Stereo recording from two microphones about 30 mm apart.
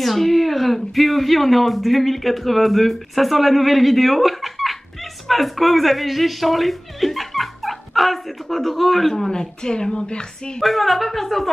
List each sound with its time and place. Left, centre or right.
0.0 s speech: centre
9.3 s speech: left
10.6 s speech: centre